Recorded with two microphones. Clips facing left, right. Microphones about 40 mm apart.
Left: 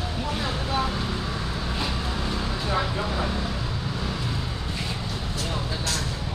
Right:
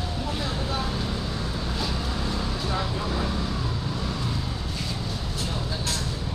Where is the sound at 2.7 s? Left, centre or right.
Left.